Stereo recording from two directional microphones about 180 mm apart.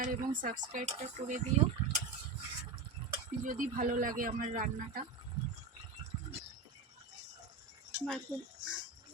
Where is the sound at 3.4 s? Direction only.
50° right (ahead or behind).